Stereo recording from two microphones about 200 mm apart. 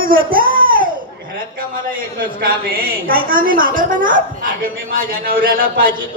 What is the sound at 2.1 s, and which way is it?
A woman's voice, 50° right (ahead or behind).